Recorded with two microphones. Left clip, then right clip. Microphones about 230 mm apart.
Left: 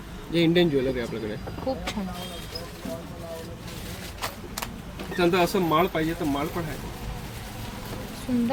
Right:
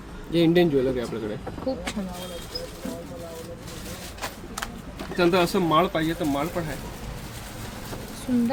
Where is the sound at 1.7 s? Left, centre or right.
Centre.